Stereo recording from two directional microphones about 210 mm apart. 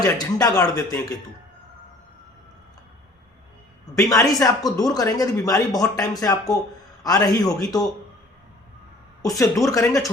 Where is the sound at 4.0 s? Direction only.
15° left (ahead or behind).